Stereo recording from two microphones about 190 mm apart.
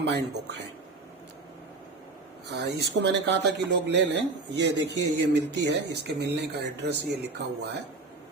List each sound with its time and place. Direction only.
0.0 s speech: 65° right (ahead or behind)
2.5 s speech: 65° right (ahead or behind)